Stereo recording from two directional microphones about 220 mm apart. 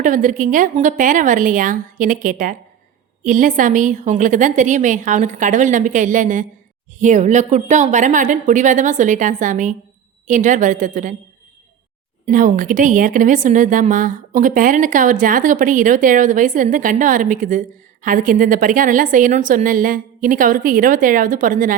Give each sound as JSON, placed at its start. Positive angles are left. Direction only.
{"t": 0.0, "sound": "a woman's voice", "side_deg": -35}
{"t": 12.2, "sound": "a woman's voice", "side_deg": -35}